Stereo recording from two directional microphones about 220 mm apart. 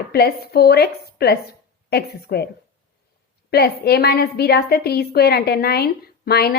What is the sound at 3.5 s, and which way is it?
A woman's voice, 45° left (ahead or behind).